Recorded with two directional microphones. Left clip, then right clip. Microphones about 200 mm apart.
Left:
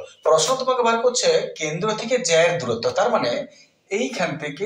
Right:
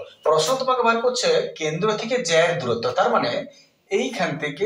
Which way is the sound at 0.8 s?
20° left (ahead or behind).